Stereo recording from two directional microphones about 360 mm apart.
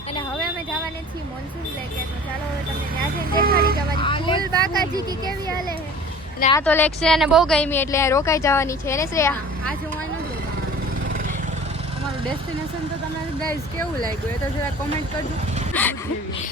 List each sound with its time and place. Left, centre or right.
3.3 s speech: right
4.0 s speech: centre
4.8 s speech: centre
6.4 s speech: centre
15.7 s a sound: centre